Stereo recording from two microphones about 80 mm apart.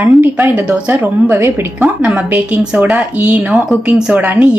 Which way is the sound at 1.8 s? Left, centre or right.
Centre.